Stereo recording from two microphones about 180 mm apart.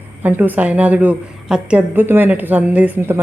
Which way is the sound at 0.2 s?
10° right (ahead or behind).